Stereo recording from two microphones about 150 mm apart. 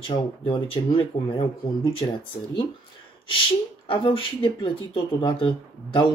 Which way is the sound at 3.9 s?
35° left (ahead or behind).